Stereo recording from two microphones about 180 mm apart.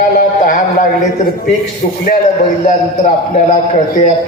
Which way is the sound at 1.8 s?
50° left (ahead or behind).